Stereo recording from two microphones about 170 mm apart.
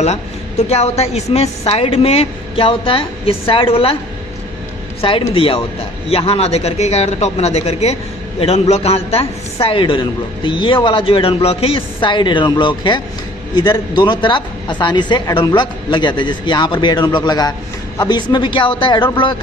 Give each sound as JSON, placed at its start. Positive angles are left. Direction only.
{"t": 0.0, "sound": "a man's voice", "side_deg": 40}
{"t": 5.0, "sound": "a man's voice", "side_deg": 30}